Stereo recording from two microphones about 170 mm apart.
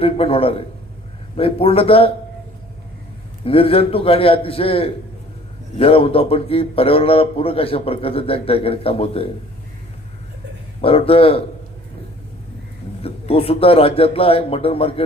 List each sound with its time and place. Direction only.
0.0 s a man's voice: 35° left (ahead or behind)
3.4 s a man's voice: 35° left (ahead or behind)
10.8 s a man's voice: 35° left (ahead or behind)
13.0 s a man's voice: 35° left (ahead or behind)